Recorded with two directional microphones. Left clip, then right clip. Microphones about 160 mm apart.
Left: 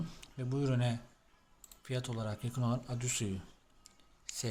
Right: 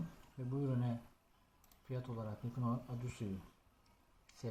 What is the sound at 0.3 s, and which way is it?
Speech, 10° left (ahead or behind).